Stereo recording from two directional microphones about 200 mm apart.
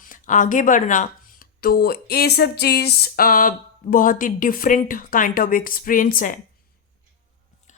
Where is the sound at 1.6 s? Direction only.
50° left (ahead or behind).